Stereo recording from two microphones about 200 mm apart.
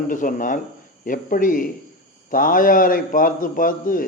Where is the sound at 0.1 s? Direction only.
40° left (ahead or behind).